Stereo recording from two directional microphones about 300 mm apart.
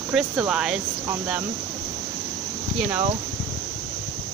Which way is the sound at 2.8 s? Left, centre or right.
Centre.